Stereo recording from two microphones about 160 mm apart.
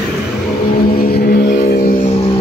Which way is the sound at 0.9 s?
65° left (ahead or behind).